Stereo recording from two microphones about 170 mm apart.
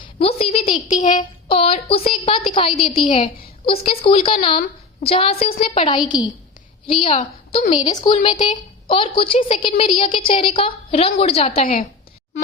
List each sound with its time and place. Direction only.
0.2 s a sound: 35° left (ahead or behind)
1.5 s a woman's voice: 35° left (ahead or behind)
7.9 s a woman's voice: 30° left (ahead or behind)